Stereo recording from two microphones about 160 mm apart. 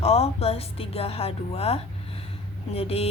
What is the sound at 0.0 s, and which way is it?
A woman's voice, 40° left (ahead or behind).